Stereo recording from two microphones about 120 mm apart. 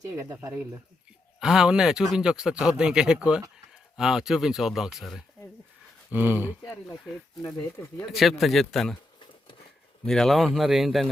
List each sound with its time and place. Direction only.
0.0 s speech: 25° right (ahead or behind)
1.4 s speech: 5° right (ahead or behind)
6.1 s speech: 15° right (ahead or behind)
6.5 s speech: 20° left (ahead or behind)
8.1 s speech: centre (ahead or behind)
10.1 s speech: 5° left (ahead or behind)